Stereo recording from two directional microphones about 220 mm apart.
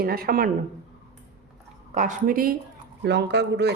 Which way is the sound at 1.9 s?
35° right (ahead or behind).